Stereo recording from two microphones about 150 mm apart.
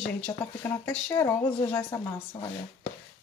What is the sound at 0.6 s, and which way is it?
Speech, 20° left (ahead or behind).